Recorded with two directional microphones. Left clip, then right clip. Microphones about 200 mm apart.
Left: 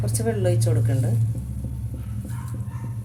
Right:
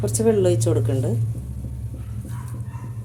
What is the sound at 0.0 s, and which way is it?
Speech, 30° right (ahead or behind).